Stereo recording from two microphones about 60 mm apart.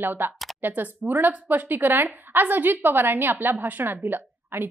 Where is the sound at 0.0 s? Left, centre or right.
Right.